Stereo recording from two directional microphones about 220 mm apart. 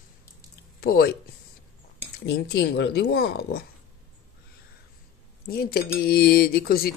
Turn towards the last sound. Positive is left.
turn(degrees=45)  # may be behind; listen again after turning